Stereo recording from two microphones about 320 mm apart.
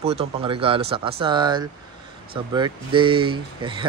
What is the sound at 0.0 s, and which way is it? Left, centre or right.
A man's voice, centre.